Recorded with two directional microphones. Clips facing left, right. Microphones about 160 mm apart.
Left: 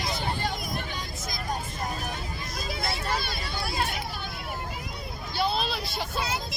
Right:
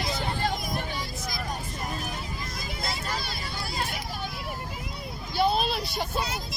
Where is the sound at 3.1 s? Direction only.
65° left (ahead or behind).